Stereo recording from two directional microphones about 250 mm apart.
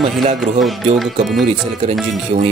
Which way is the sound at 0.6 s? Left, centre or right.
Centre.